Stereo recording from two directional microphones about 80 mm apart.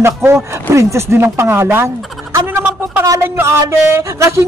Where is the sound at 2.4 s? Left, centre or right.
Right.